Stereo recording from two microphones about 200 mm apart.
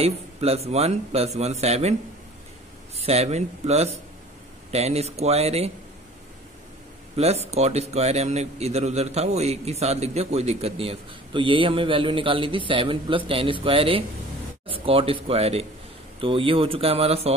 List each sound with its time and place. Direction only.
0.0 s a man's voice: 30° right (ahead or behind)
3.0 s a man's voice: 30° right (ahead or behind)
7.2 s a man's voice: 30° right (ahead or behind)